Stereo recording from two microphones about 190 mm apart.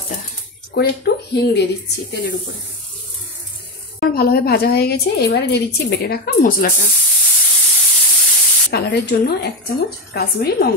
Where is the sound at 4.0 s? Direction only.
50° left (ahead or behind).